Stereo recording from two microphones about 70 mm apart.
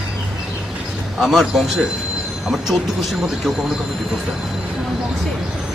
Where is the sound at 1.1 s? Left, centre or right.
Centre.